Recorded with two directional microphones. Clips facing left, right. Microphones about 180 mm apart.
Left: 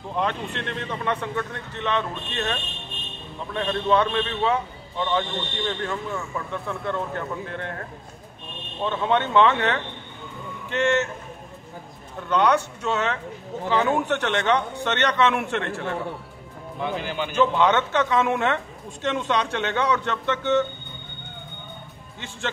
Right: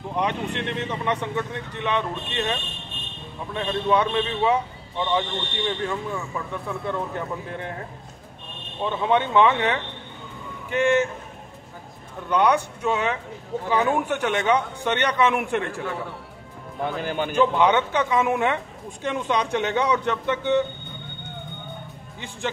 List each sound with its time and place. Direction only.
0.1 s speech: 15° right (ahead or behind)
8.8 s speech: 15° right (ahead or behind)
12.3 s speech: 15° right (ahead or behind)
16.8 s speech: 45° right (ahead or behind)
17.4 s speech: 15° right (ahead or behind)